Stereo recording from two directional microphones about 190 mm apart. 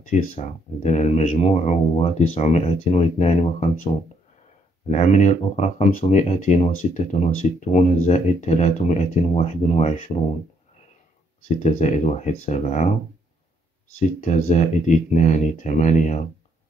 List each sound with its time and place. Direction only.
0.0 s speech: 40° left (ahead or behind)
4.8 s speech: 35° left (ahead or behind)
11.4 s speech: 40° left (ahead or behind)
13.9 s speech: 40° left (ahead or behind)